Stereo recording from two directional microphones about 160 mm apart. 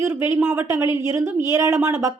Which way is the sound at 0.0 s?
15° right (ahead or behind).